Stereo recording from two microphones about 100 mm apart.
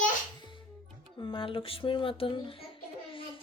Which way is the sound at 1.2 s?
55° left (ahead or behind).